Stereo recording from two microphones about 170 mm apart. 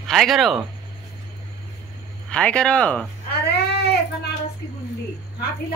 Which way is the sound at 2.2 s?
5° left (ahead or behind).